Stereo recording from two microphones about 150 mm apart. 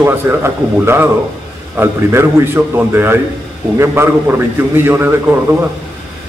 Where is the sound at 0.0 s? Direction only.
15° right (ahead or behind).